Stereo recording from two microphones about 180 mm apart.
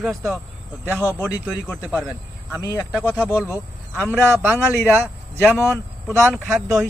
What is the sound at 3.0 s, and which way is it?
Speech, centre (ahead or behind).